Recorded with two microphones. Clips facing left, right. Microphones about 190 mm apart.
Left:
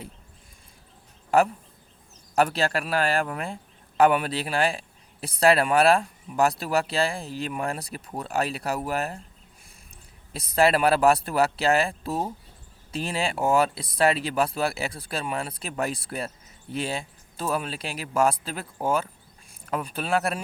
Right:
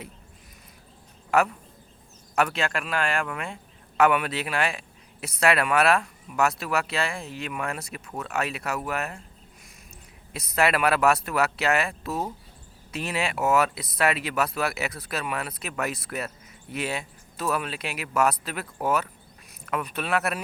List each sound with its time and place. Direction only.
2.3 s a man's voice: 35° left (ahead or behind)
10.3 s a man's voice: 30° left (ahead or behind)